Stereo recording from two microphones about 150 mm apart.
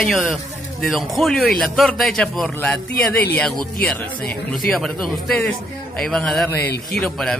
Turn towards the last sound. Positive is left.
turn(degrees=5)  # may be behind; listen again after turning